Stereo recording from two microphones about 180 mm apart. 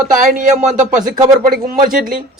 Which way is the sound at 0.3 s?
45° right (ahead or behind).